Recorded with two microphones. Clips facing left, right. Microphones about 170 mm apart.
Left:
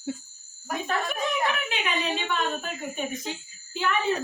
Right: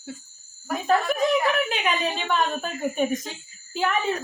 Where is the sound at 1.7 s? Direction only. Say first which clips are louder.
Right 3 dB; 45° right (ahead or behind).